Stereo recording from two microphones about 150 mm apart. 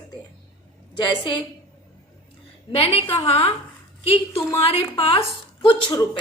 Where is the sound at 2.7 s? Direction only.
40° left (ahead or behind).